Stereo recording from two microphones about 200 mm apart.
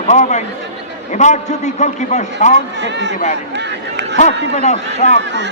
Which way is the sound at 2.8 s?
60° right (ahead or behind).